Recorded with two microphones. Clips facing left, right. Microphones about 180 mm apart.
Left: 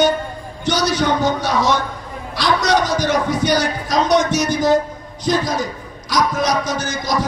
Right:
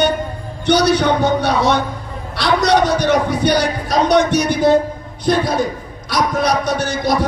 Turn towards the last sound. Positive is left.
turn(degrees=-60)  # may be behind; listen again after turning